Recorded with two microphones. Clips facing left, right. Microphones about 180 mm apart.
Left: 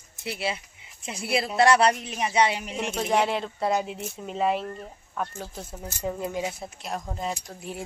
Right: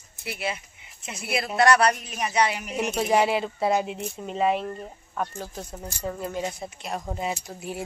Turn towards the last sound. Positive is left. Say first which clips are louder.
# right 2 dB
turn(degrees=-5)  # may be behind; listen again after turning